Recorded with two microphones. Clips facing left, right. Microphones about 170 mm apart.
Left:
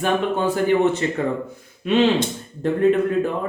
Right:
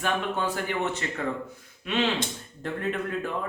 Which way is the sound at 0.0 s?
25° left (ahead or behind).